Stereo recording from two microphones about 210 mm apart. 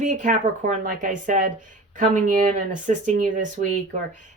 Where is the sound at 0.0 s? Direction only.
35° right (ahead or behind).